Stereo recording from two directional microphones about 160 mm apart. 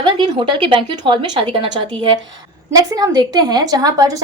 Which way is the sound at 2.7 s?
25° right (ahead or behind).